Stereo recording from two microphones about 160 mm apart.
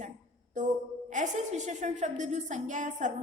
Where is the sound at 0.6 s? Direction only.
50° right (ahead or behind).